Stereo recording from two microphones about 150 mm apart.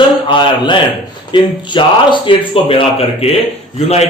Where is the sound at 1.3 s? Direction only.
30° left (ahead or behind).